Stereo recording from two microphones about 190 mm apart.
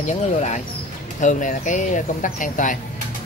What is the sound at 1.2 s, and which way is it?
Speech, 40° left (ahead or behind).